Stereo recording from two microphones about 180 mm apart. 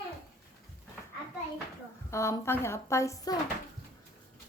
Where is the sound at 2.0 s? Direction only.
15° left (ahead or behind).